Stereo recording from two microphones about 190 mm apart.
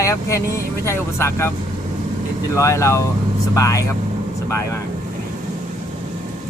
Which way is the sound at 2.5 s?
15° left (ahead or behind).